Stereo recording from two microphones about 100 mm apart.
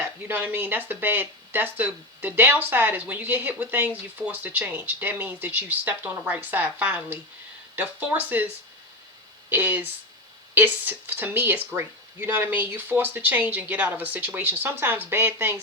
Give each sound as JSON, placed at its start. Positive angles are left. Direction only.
{"t": 0.0, "sound": "speech", "side_deg": -20}
{"t": 9.5, "sound": "speech", "side_deg": -20}